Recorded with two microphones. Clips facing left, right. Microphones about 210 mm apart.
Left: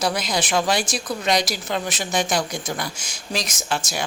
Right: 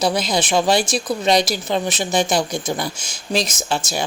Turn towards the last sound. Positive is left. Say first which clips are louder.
# right 3 dB
turn(degrees=-30)  # may be behind; listen again after turning